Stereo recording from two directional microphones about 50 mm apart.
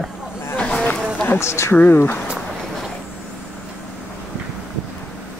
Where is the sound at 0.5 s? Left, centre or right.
Left.